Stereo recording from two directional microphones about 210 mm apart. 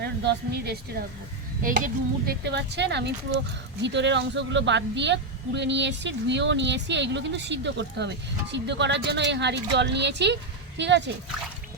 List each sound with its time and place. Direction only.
0.0 s a woman's voice: 50° right (ahead or behind)